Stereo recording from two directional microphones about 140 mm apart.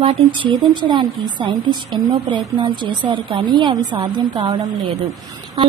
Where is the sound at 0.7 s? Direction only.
35° right (ahead or behind).